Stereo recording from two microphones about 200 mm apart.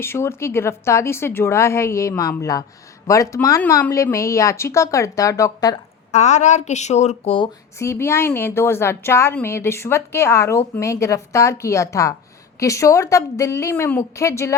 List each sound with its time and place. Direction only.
0.0 s a woman's voice: 10° left (ahead or behind)
6.1 s speech: 35° left (ahead or behind)
7.8 s a woman's voice: 15° left (ahead or behind)